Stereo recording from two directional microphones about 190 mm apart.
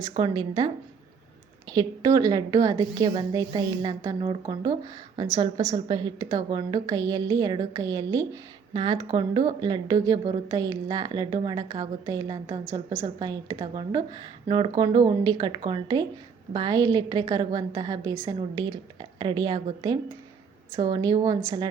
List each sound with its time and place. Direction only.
0.1 s a woman's voice: 25° right (ahead or behind)
1.7 s a woman's voice: 20° right (ahead or behind)